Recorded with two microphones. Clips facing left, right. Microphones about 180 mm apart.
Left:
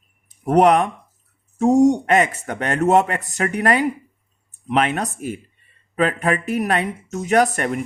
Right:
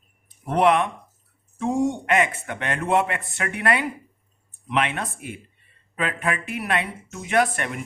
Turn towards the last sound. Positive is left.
turn(degrees=40)  # may be behind; listen again after turning